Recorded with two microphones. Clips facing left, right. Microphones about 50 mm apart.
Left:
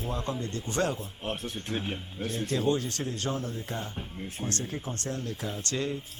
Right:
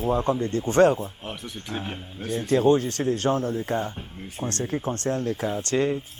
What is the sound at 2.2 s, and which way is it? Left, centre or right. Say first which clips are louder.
Speech: right 9 dB; right.